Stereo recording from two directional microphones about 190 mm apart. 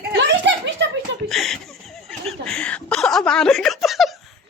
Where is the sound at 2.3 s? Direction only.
5° left (ahead or behind).